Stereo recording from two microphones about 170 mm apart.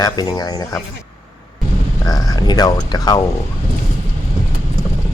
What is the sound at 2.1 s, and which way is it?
Speech, 25° left (ahead or behind).